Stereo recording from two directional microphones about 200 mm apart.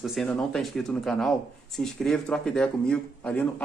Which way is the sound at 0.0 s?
Centre (ahead or behind).